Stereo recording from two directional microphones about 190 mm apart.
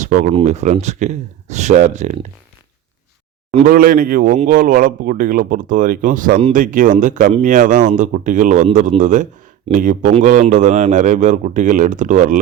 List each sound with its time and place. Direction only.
0.0 s a man's voice: 40° right (ahead or behind)
3.7 s a man's voice: 50° right (ahead or behind)